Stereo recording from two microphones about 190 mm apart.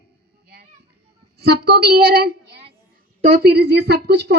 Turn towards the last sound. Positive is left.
turn(degrees=-60)  # may be behind; listen again after turning